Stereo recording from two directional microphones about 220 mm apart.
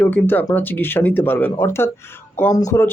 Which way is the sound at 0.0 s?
10° left (ahead or behind).